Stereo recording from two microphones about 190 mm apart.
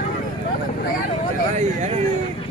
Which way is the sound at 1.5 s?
40° right (ahead or behind).